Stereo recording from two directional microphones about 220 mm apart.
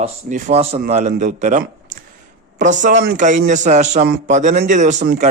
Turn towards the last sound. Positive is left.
turn(degrees=-35)  # may be behind; listen again after turning